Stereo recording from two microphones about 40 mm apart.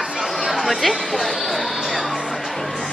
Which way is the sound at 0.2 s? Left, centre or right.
Centre.